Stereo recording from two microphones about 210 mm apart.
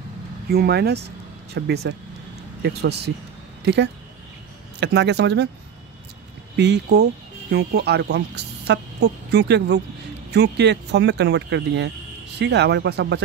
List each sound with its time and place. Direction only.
0.5 s speech: 50° right (ahead or behind)
6.5 s speech: 55° right (ahead or behind)